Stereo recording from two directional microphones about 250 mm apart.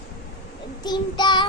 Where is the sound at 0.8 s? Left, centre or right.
Centre.